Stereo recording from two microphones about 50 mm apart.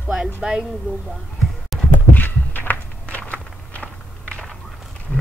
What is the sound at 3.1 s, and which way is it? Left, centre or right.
Walk, left.